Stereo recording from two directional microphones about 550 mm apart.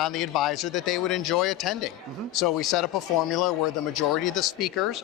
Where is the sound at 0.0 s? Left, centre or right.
Centre.